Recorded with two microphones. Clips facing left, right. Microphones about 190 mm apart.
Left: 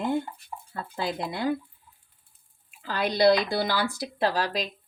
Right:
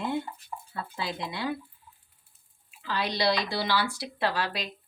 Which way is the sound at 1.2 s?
50° left (ahead or behind).